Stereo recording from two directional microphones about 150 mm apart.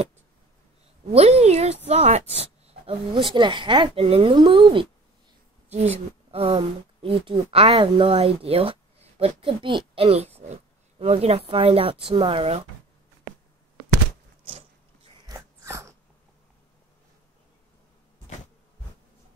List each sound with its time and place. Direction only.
1.1 s a woman's voice: 45° right (ahead or behind)
5.7 s speech: 45° right (ahead or behind)
15.2 s dog: 20° right (ahead or behind)